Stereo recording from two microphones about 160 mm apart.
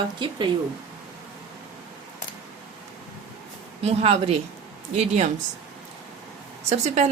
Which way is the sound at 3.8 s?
40° right (ahead or behind).